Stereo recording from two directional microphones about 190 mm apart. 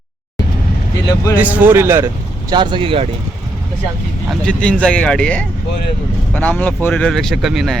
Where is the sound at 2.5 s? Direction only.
25° right (ahead or behind).